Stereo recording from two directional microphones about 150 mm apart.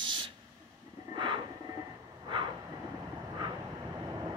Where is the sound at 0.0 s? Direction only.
30° right (ahead or behind).